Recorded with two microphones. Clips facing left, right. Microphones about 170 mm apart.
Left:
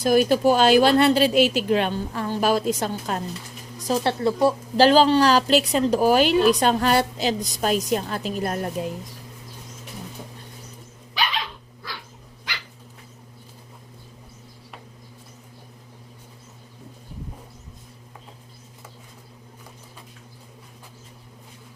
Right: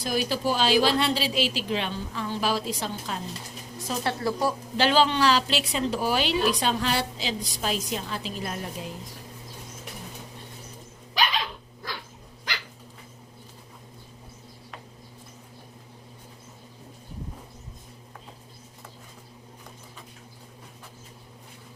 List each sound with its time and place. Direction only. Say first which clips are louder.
0.0 s speech: left 9 dB; 50° left (ahead or behind)
3.8 s speech: left 6 dB; 30° left (ahead or behind)
4.8 s speech: left 6 dB; 40° left (ahead or behind)